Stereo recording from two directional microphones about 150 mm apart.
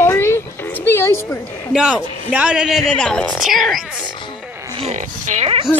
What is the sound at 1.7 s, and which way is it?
A man's voice, 5° right (ahead or behind).